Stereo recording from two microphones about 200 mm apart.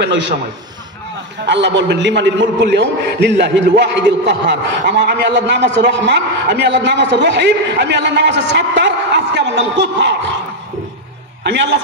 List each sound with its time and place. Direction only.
1.4 s a man's voice: 60° right (ahead or behind)
11.4 s a man's voice: 60° right (ahead or behind)